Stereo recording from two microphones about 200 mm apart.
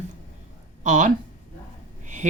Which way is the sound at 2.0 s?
35° right (ahead or behind).